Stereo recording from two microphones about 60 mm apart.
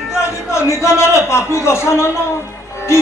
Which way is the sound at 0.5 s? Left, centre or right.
Left.